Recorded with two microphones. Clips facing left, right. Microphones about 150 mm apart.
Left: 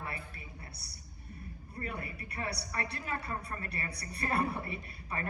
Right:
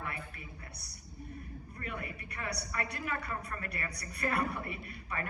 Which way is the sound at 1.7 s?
30° left (ahead or behind).